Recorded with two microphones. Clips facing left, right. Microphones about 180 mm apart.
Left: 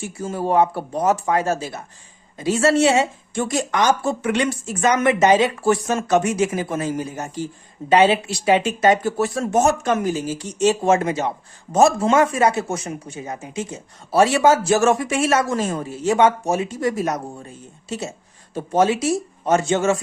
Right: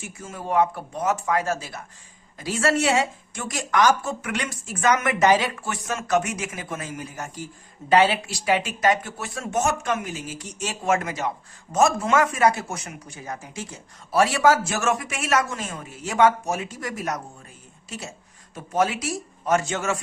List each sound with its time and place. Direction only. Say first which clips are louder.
0.0 s speech: left 10 dB; 35° left (ahead or behind)